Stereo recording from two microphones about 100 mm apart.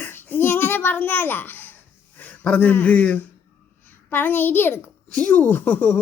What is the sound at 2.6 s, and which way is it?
A woman's voice, 20° left (ahead or behind).